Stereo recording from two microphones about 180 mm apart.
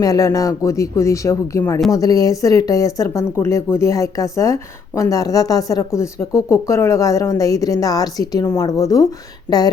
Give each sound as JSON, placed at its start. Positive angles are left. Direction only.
{"t": 0.0, "sound": "a woman's voice", "side_deg": 20}